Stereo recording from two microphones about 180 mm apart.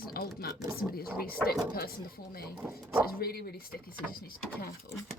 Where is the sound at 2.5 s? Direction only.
5° right (ahead or behind).